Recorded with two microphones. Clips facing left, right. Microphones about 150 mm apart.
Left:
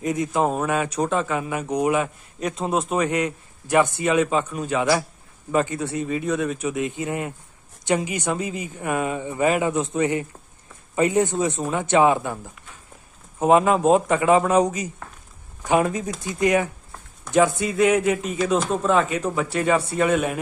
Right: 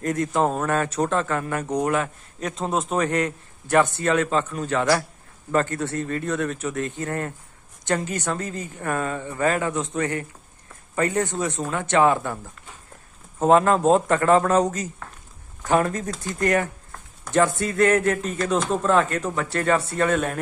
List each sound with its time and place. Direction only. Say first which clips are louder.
0.0 s a man's voice: even; 5° left (ahead or behind)
13.4 s a man's voice: even; 10° left (ahead or behind)